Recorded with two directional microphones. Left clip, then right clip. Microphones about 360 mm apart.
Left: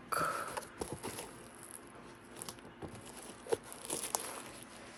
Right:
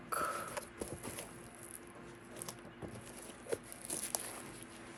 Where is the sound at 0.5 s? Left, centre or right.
Centre.